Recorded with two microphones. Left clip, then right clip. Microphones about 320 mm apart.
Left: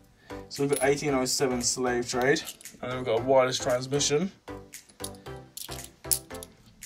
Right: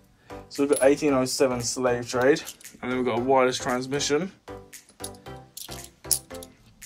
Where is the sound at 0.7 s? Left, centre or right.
Left.